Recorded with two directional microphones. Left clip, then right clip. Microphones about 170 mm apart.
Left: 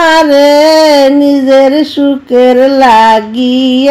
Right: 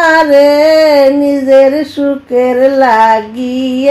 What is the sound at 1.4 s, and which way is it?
Speech, 25° left (ahead or behind).